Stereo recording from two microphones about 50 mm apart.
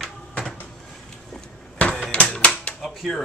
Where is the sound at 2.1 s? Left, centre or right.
Left.